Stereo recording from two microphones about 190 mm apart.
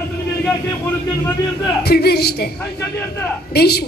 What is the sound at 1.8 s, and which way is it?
Speech, 55° left (ahead or behind).